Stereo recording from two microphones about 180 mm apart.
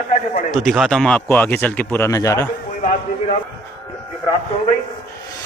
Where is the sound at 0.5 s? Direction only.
Centre (ahead or behind); by 2.5 s 15° left (ahead or behind).